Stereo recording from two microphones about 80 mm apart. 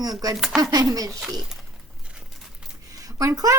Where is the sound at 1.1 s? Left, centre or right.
Centre.